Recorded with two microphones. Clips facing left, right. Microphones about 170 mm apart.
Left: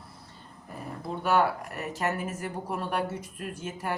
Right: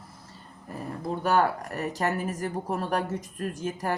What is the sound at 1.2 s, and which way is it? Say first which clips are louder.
Speech: right 1 dB; 40° right (ahead or behind).